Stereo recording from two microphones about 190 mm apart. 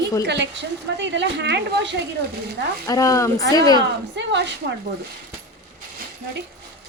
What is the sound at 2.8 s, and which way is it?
Speech, 15° left (ahead or behind).